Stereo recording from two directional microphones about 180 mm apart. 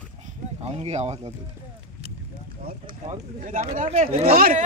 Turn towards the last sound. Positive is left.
turn(degrees=-55)  # may be behind; listen again after turning